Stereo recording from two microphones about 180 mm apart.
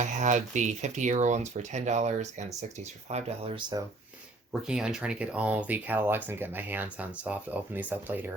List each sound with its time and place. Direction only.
0.0 s speech: 40° right (ahead or behind); by 3.8 s 25° right (ahead or behind)
4.6 s speech: 5° right (ahead or behind)